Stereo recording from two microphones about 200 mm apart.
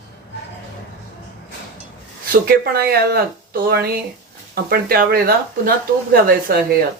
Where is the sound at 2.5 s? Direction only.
50° right (ahead or behind).